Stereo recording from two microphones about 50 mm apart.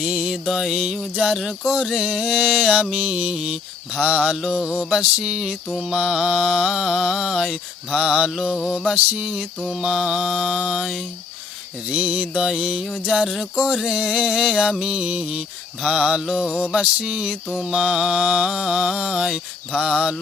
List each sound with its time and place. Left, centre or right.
0.0 s music: centre
7.9 s music: centre
13.3 s music: centre